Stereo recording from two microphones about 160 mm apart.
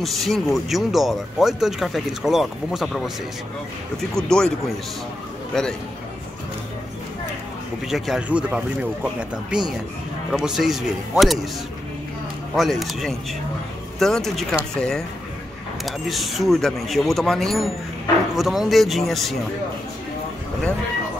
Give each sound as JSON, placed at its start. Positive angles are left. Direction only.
{"t": 0.0, "sound": "speech", "side_deg": 0}
{"t": 5.5, "sound": "a man's voice", "side_deg": 5}
{"t": 7.9, "sound": "speech", "side_deg": -5}
{"t": 12.5, "sound": "speech", "side_deg": 0}